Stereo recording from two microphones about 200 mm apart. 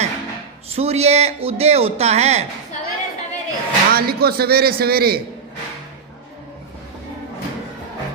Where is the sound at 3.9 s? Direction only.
50° right (ahead or behind).